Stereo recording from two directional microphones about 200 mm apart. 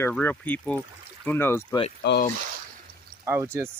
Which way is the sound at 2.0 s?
55° left (ahead or behind).